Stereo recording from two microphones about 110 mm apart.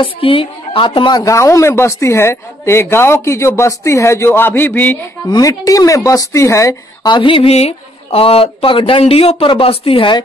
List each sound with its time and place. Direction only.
0.0 s a woman's voice: 55° left (ahead or behind)
1.2 s a woman's voice: 25° left (ahead or behind)
5.3 s a woman's voice: 35° left (ahead or behind)
7.1 s speech: 50° left (ahead or behind)
9.0 s speech: 70° left (ahead or behind)